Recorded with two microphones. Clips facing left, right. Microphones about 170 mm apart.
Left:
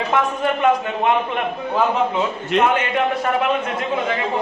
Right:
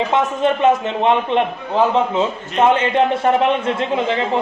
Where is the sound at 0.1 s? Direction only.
25° right (ahead or behind).